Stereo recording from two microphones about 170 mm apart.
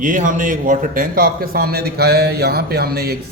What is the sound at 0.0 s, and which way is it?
A man's voice, 50° right (ahead or behind).